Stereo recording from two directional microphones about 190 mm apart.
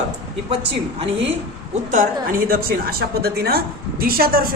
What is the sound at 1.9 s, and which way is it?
A woman's voice, 45° right (ahead or behind).